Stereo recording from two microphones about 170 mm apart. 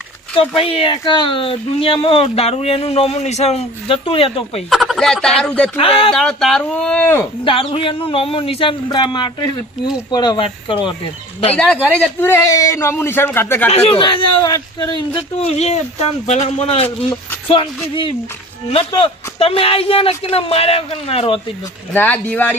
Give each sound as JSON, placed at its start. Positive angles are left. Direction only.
{"t": 0.5, "sound": "speech", "side_deg": 30}
{"t": 4.7, "sound": "speech", "side_deg": 0}
{"t": 5.7, "sound": "speech", "side_deg": 35}
{"t": 6.1, "sound": "a man's voice", "side_deg": 5}
{"t": 7.4, "sound": "speech", "side_deg": 30}
{"t": 11.5, "sound": "a man's voice", "side_deg": 5}
{"t": 14.0, "sound": "speech", "side_deg": 25}
{"t": 18.7, "sound": "speech", "side_deg": 30}
{"t": 21.9, "sound": "a man's voice", "side_deg": 10}